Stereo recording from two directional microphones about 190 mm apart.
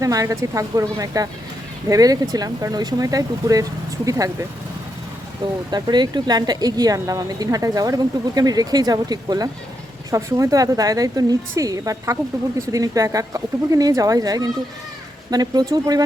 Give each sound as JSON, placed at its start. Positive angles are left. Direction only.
{"t": 0.0, "sound": "speech", "side_deg": -20}
{"t": 5.7, "sound": "speech", "side_deg": -20}